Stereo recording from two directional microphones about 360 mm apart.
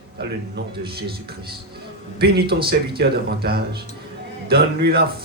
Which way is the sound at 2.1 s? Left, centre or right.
Right.